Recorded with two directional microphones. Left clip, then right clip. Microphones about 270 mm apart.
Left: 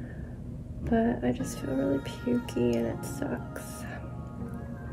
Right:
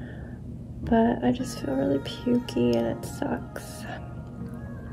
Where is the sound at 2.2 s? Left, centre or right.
Centre.